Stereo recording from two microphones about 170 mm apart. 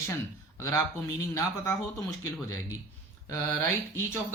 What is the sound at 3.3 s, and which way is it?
Speech, 15° left (ahead or behind).